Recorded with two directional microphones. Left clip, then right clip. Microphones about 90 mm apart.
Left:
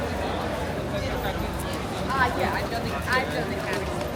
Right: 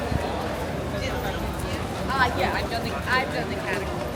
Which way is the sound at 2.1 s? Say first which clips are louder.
Right 1 dB; 25° right (ahead or behind).